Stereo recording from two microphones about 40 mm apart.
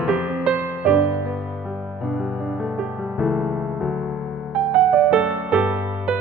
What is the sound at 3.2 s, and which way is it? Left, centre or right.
Music, centre.